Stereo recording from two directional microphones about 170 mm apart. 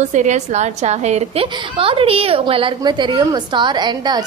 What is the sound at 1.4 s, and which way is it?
A woman's voice, 30° right (ahead or behind).